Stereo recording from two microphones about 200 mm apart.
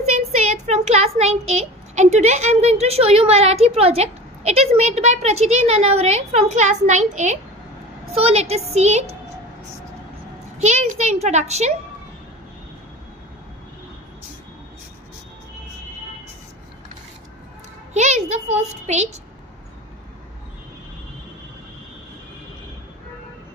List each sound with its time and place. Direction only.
0.0 s a sound: 35° right (ahead or behind)
2.0 s a woman's voice: 35° right (ahead or behind)
10.6 s a woman's voice: 35° right (ahead or behind)
17.9 s a woman's voice: 35° right (ahead or behind)